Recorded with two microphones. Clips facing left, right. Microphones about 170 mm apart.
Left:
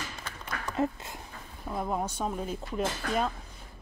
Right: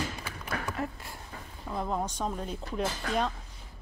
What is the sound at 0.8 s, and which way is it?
Dog, 20° left (ahead or behind).